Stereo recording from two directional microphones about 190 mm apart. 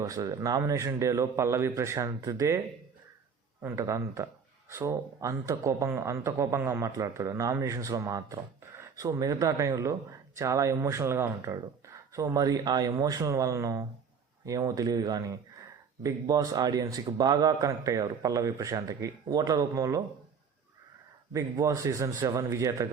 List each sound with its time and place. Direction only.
0.0 s speech: 20° right (ahead or behind)
3.6 s speech: 15° right (ahead or behind)
21.3 s speech: 20° right (ahead or behind)